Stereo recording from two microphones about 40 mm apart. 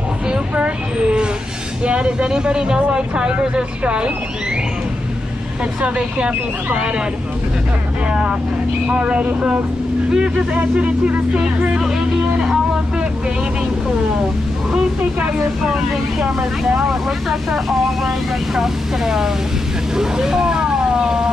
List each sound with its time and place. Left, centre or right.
0.3 s vehicle: right
1.9 s speech: right
5.8 s speech: right
8.1 s speech: right
10.6 s speech: right
15.6 s speech: centre
17.3 s speech: centre